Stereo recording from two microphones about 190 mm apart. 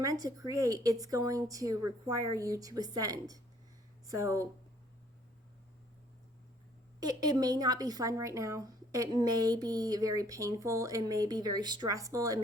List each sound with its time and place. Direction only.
0.0 s a woman's voice: 15° right (ahead or behind)
7.0 s speech: 20° right (ahead or behind)